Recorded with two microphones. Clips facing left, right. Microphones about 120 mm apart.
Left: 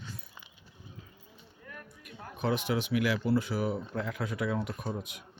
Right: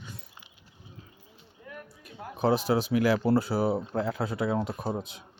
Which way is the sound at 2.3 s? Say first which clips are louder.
Right 6 dB; 35° right (ahead or behind).